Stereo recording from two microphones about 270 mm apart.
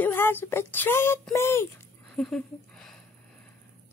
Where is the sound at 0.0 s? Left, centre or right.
Centre.